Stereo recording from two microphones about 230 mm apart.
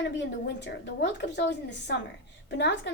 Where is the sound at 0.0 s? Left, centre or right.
Left.